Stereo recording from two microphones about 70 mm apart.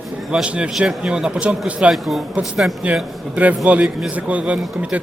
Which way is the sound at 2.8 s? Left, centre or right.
Centre.